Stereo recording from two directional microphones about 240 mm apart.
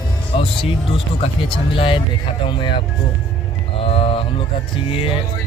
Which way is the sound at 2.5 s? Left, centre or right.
Centre.